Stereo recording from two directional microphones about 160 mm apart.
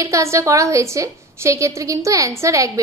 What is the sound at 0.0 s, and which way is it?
A woman's voice, 20° right (ahead or behind).